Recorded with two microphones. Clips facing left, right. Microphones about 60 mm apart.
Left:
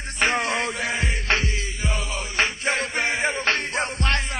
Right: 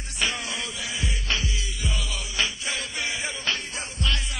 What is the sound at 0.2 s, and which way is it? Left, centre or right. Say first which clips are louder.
Music: left 7 dB; left.